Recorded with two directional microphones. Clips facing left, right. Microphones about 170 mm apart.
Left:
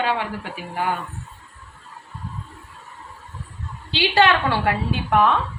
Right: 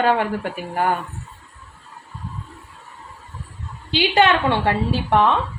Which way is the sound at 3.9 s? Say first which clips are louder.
Right 1 dB; 20° right (ahead or behind).